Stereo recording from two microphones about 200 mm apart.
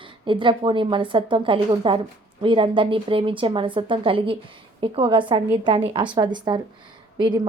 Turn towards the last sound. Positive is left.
turn(degrees=-20)  # may be behind; listen again after turning